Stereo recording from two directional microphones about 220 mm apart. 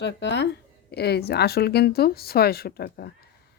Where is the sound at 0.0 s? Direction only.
50° left (ahead or behind).